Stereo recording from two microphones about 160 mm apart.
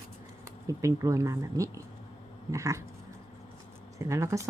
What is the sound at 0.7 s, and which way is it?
Speech, 20° right (ahead or behind).